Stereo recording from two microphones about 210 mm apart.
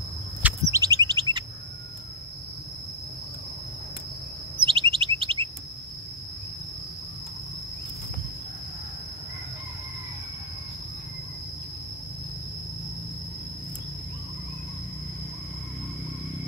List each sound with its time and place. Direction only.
0.4 s a sound: 10° right (ahead or behind)
1.2 s chirp: 75° right (ahead or behind)
4.6 s chirp: 25° right (ahead or behind)